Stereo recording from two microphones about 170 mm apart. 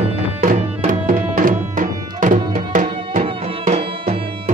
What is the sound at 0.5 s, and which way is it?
Music, 55° right (ahead or behind).